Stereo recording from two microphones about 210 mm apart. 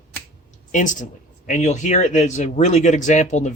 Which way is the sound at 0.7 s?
35° left (ahead or behind).